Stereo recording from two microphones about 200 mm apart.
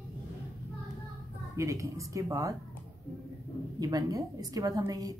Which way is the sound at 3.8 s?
20° right (ahead or behind).